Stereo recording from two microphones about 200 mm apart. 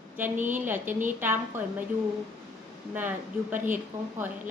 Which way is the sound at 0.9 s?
40° right (ahead or behind).